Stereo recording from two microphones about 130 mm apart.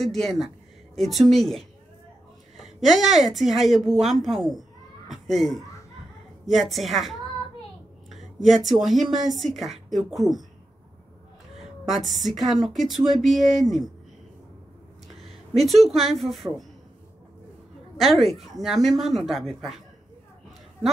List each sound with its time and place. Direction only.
0.0 s a woman's voice: centre (ahead or behind)
8.5 s a woman's voice: centre (ahead or behind)
11.5 s a woman's voice: centre (ahead or behind)
15.2 s speech: centre (ahead or behind)
18.2 s a woman's voice: centre (ahead or behind)